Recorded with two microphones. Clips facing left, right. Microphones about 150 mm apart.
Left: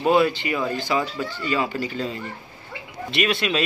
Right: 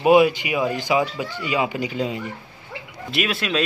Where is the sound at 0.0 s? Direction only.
15° right (ahead or behind).